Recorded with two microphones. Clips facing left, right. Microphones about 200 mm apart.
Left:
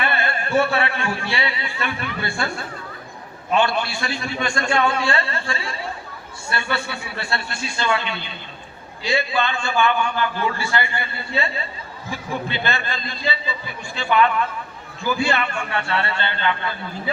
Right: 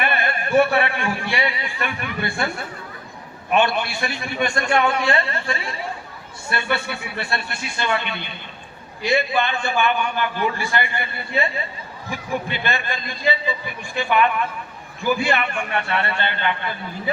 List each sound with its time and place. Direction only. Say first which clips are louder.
0.0 s a man's voice: even; 15° right (ahead or behind)
3.5 s a man's voice: right 1 dB; 20° right (ahead or behind)
12.5 s a man's voice: even; 15° right (ahead or behind)